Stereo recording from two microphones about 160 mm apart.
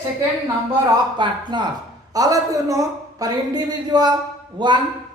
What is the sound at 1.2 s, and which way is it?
A woman's voice, 30° right (ahead or behind).